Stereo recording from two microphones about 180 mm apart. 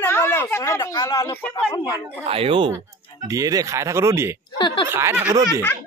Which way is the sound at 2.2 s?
30° right (ahead or behind).